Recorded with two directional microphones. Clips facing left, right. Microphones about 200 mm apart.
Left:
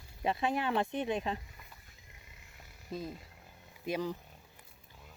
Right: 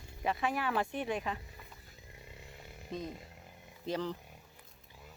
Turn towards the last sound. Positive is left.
turn(degrees=10)  # may be behind; listen again after turning